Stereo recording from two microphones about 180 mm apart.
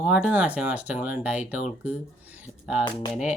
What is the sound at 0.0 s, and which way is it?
Speech, 5° right (ahead or behind).